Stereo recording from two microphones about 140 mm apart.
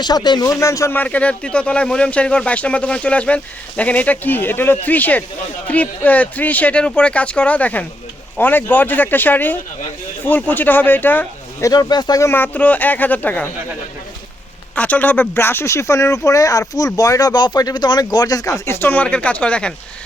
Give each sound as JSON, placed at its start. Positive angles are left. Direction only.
{"t": 0.0, "sound": "speech", "side_deg": 30}
{"t": 11.7, "sound": "speech", "side_deg": 30}
{"t": 12.3, "sound": "speech", "side_deg": 10}
{"t": 14.8, "sound": "speech", "side_deg": 10}